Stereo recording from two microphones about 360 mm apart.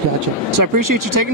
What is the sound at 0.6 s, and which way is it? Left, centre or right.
Speech, right.